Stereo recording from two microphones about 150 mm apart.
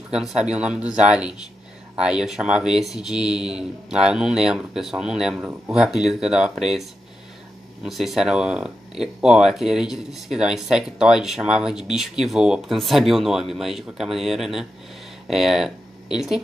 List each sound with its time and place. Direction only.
0.1 s speech: 5° right (ahead or behind)